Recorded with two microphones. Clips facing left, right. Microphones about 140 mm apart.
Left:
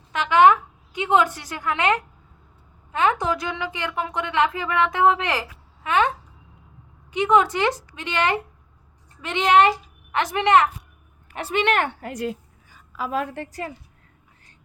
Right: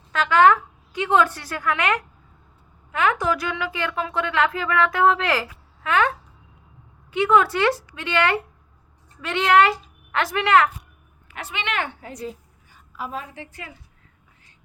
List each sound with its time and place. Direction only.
0.1 s a woman's voice: 20° left (ahead or behind)
11.5 s a woman's voice: 45° left (ahead or behind)
12.0 s a woman's voice: 75° left (ahead or behind)
13.4 s a woman's voice: 40° left (ahead or behind)